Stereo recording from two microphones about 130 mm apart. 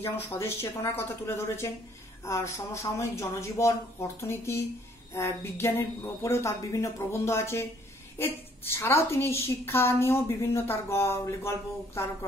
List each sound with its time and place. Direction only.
0.0 s a woman's voice: 20° left (ahead or behind)